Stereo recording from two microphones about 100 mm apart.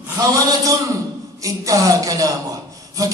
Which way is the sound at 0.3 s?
35° right (ahead or behind).